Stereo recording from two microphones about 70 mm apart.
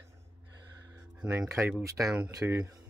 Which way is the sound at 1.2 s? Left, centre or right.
Centre.